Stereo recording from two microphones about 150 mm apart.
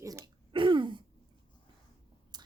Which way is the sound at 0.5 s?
35° right (ahead or behind).